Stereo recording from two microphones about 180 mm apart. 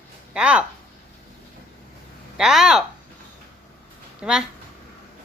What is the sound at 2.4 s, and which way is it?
Speech, 5° right (ahead or behind).